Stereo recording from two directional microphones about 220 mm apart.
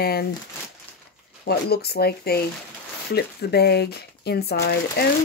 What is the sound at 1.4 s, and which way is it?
Speech, 45° left (ahead or behind).